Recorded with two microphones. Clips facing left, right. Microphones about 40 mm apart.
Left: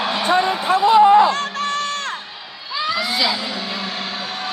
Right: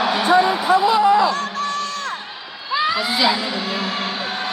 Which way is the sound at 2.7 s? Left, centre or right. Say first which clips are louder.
Right 2 dB; centre.